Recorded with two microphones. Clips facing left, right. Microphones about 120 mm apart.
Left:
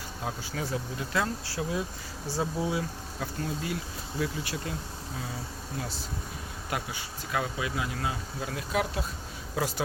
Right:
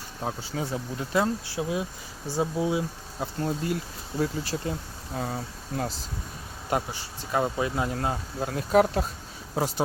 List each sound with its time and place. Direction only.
0.3 s speech: 25° right (ahead or behind)
3.4 s speech: 40° right (ahead or behind)
5.1 s speech: 55° right (ahead or behind)
6.7 s speech: 35° right (ahead or behind)